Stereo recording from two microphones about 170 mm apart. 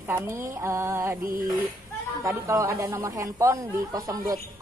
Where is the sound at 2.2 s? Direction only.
15° right (ahead or behind).